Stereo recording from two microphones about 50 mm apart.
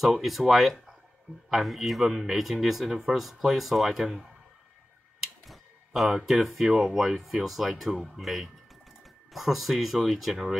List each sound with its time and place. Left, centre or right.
0.0 s speech: centre